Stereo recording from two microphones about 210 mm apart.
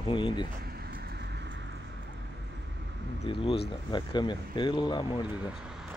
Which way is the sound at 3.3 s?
25° left (ahead or behind).